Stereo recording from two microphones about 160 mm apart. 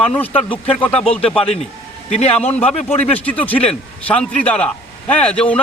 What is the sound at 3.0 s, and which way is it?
A man's voice, 10° left (ahead or behind).